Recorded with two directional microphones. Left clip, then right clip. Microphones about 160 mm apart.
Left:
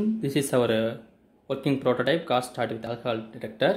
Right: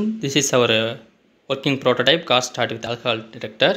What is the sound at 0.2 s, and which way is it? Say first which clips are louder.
Speech: right 8 dB; 10° right (ahead or behind).